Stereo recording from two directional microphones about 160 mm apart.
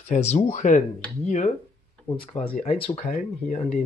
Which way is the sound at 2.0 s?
5° left (ahead or behind).